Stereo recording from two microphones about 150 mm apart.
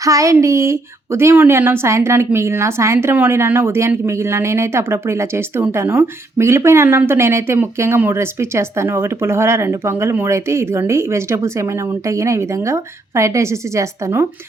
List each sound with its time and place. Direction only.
0.0 s speech: 20° right (ahead or behind)